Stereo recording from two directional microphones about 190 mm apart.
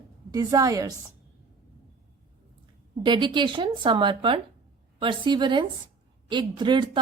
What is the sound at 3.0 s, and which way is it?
Speech, 25° right (ahead or behind).